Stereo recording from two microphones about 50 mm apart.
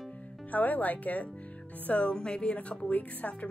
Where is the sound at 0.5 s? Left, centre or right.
Left.